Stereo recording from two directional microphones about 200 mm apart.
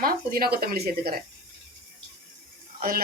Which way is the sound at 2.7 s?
45° right (ahead or behind).